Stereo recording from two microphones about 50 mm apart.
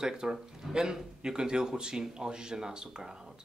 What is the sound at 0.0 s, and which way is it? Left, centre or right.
Speech, centre.